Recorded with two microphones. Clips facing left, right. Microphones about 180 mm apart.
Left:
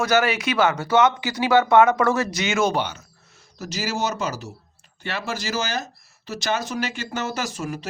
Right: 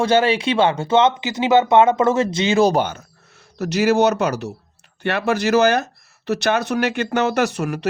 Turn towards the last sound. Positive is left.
turn(degrees=-65)  # may be behind; listen again after turning